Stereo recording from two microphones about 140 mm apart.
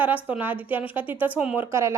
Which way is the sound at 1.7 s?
20° right (ahead or behind).